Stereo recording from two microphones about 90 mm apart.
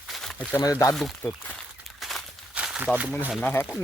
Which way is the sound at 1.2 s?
30° left (ahead or behind).